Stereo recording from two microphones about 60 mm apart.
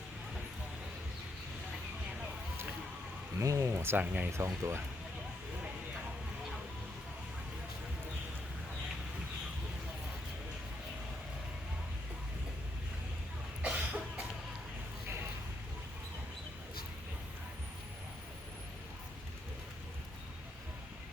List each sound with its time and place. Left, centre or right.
3.3 s speech: right
3.7 s speech: right
4.0 s speech: right
4.3 s speech: right
13.6 s cough: right